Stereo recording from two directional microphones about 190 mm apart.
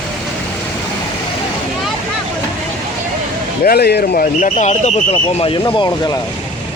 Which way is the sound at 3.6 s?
55° left (ahead or behind).